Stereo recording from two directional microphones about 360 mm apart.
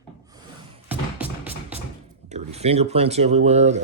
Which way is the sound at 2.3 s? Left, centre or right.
Centre.